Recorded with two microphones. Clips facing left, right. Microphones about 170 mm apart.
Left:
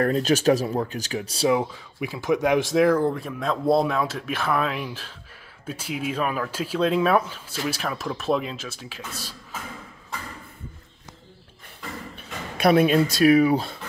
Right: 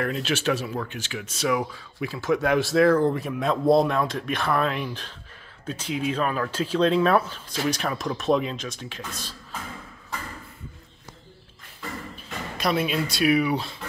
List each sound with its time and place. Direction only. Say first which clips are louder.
0.0 s speech: left 6 dB; 40° left (ahead or behind); by 3.2 s 10° left (ahead or behind)
3.2 s speech: right 2 dB; centre (ahead or behind)
12.2 s a sound: left 7 dB; 60° left (ahead or behind)
12.9 s speech: left 5 dB; 40° left (ahead or behind)